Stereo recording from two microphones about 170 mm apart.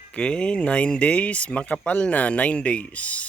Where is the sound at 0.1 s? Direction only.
5° left (ahead or behind).